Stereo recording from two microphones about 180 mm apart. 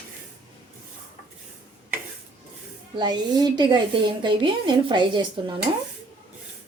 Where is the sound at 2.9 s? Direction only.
25° right (ahead or behind).